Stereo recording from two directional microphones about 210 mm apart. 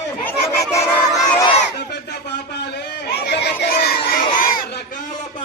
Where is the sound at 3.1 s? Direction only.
50° left (ahead or behind).